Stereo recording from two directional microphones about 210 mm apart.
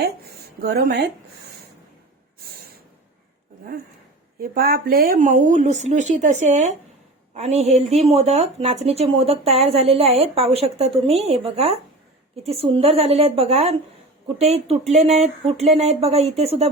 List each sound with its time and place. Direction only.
0.6 s speech: 45° right (ahead or behind)
4.4 s speech: 45° right (ahead or behind); by 16.6 s 30° right (ahead or behind)